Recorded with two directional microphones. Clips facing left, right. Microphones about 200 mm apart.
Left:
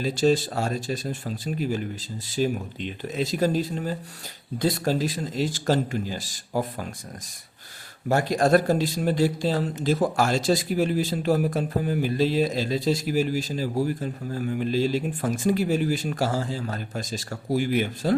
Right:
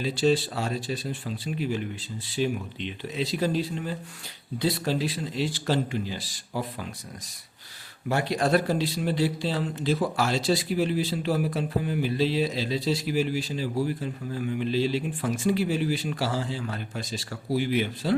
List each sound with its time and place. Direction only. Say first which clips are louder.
0.0 s speech: left 2 dB; 45° left (ahead or behind)
8.0 s speech: left 4 dB; 45° left (ahead or behind)